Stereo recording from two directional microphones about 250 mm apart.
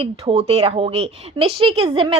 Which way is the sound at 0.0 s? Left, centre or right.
Right.